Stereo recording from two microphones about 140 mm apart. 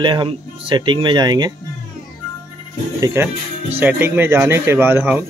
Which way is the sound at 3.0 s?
20° right (ahead or behind).